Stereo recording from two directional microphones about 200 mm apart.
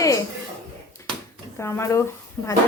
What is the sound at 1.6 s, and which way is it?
Speech, 15° left (ahead or behind).